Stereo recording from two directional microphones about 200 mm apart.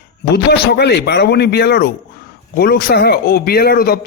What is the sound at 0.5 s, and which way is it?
A man's voice, 55° left (ahead or behind).